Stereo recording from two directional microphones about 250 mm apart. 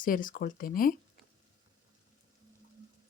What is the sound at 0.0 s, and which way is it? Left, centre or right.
Speech, left.